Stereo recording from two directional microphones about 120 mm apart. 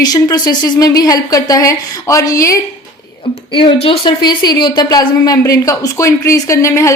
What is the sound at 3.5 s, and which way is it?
Speech, 45° left (ahead or behind).